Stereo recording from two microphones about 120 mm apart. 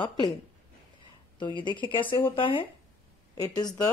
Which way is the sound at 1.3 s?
40° left (ahead or behind).